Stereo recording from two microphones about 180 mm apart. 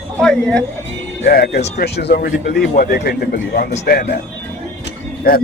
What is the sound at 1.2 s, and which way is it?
Speech, 60° left (ahead or behind).